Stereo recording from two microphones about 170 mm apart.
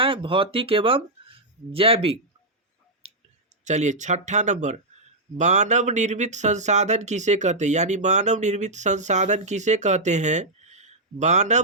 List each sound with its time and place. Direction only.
0.0 s speech: 30° right (ahead or behind)
3.6 s speech: 45° right (ahead or behind)